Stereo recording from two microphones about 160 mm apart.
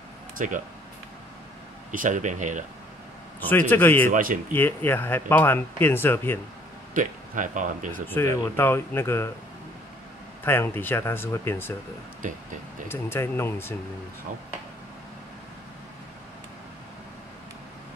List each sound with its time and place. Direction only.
0.4 s speech: 55° right (ahead or behind)
1.9 s speech: 55° right (ahead or behind)
3.3 s speech: 10° left (ahead or behind)
4.1 s speech: 60° right (ahead or behind)
4.6 s speech: 10° left (ahead or behind)
6.9 s speech: 55° right (ahead or behind)
8.1 s speech: 15° left (ahead or behind)
10.4 s speech: 15° left (ahead or behind)
12.8 s speech: 15° left (ahead or behind)